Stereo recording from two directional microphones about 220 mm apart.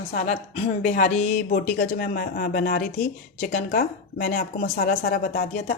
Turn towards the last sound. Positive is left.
turn(degrees=40)  # may be behind; listen again after turning